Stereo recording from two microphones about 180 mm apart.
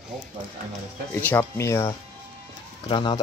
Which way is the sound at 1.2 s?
10° left (ahead or behind).